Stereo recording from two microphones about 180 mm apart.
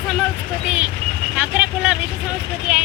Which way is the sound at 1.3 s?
5° right (ahead or behind).